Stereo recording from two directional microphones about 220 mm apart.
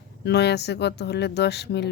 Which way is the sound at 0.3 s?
50° left (ahead or behind).